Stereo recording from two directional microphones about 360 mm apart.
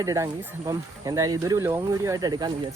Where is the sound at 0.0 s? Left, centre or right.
Centre.